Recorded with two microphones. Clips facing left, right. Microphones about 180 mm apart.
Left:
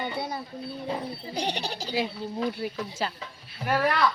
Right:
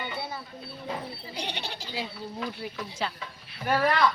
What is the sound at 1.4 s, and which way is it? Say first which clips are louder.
Speech: left 6 dB; 40° left (ahead or behind).